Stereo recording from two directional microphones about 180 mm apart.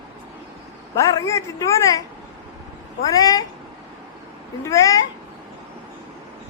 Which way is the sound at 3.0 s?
20° left (ahead or behind).